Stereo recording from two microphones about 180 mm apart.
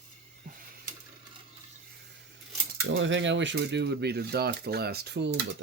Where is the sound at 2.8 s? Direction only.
90° right; by 5.4 s 65° right (ahead or behind).